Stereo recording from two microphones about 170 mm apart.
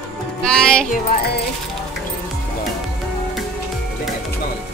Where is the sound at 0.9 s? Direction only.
60° left (ahead or behind).